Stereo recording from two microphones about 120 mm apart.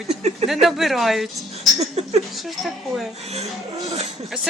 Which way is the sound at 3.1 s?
65° right (ahead or behind).